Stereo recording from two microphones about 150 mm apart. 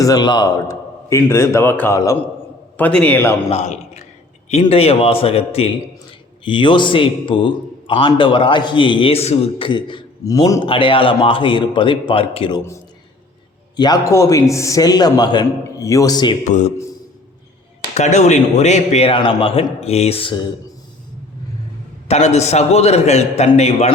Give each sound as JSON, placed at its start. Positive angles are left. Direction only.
{"t": 0.0, "sound": "a man's voice", "side_deg": 25}
{"t": 3.5, "sound": "a man's voice", "side_deg": 50}
{"t": 16.4, "sound": "a man's voice", "side_deg": 50}
{"t": 17.9, "sound": "a man's voice", "side_deg": 50}
{"t": 22.0, "sound": "a man's voice", "side_deg": 45}